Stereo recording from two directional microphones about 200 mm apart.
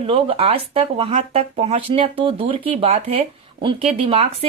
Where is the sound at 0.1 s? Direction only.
25° right (ahead or behind).